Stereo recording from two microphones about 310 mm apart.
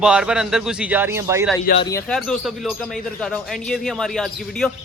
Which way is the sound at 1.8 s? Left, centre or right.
Centre.